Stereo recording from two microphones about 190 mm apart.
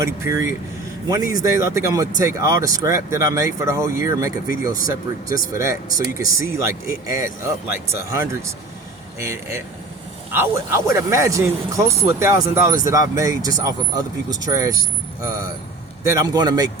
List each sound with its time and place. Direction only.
0.0 s speech: 15° right (ahead or behind)
5.3 s a man's voice: 15° right (ahead or behind)